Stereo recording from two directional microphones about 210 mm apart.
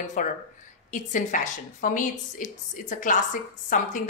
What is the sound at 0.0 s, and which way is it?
A woman's voice, 35° left (ahead or behind).